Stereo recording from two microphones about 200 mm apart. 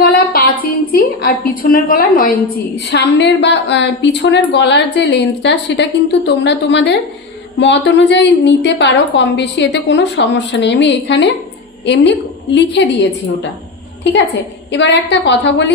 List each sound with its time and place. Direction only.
0.0 s a woman's voice: 50° left (ahead or behind)
14.1 s a woman's voice: 60° left (ahead or behind)